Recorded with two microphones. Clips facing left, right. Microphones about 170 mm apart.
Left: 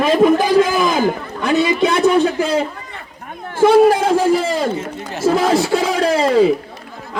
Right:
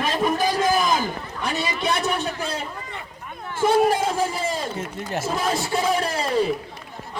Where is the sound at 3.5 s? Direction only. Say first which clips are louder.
Left 8 dB; 75° left (ahead or behind).